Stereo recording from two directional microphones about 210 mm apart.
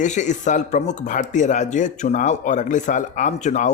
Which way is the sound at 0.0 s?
35° left (ahead or behind).